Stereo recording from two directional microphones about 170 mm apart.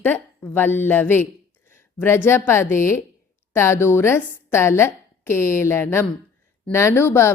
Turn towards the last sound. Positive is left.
turn(degrees=15)  # may be behind; listen again after turning